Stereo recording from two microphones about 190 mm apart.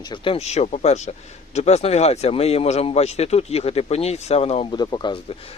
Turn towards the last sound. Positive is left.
turn(degrees=25)  # may be behind; listen again after turning